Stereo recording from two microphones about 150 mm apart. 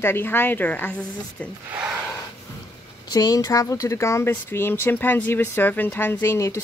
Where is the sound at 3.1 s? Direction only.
25° left (ahead or behind).